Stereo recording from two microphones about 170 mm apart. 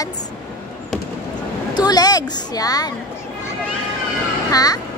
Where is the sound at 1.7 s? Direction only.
25° left (ahead or behind).